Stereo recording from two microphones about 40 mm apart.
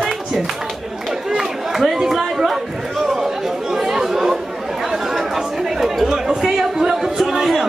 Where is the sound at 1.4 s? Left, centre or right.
Centre.